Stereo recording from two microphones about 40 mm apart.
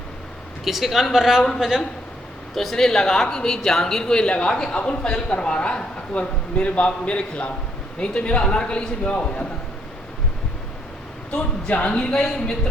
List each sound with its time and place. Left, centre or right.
0.6 s speech: centre
2.6 s speech: centre; by 9.5 s left
11.3 s speech: left